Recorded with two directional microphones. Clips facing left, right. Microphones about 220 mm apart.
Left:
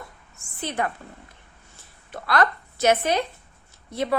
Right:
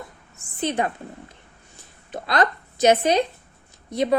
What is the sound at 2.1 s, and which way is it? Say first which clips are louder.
A woman's voice: right 1 dB; 20° right (ahead or behind).